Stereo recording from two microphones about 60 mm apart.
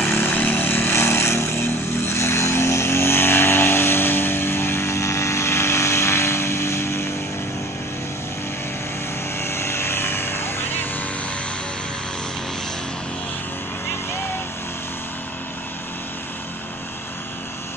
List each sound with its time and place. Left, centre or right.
0.1 s vehicle: left
9.4 s vehicle: left